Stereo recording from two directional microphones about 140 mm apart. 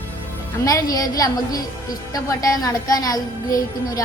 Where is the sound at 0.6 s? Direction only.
25° left (ahead or behind).